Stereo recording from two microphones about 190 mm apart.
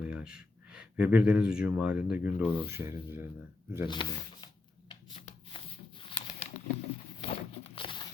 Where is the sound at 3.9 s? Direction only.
25° left (ahead or behind).